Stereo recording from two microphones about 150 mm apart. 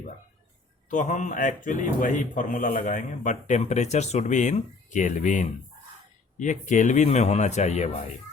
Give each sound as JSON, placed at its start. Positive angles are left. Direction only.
{"t": 0.9, "sound": "speech", "side_deg": 55}